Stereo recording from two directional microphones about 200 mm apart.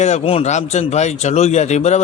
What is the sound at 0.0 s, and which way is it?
A man's voice, 30° left (ahead or behind).